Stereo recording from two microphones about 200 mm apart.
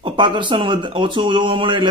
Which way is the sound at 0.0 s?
25° right (ahead or behind).